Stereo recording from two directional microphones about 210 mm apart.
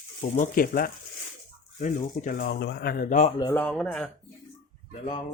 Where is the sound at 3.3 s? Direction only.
20° left (ahead or behind).